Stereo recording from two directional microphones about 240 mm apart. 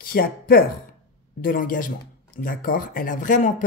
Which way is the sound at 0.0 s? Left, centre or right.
Left.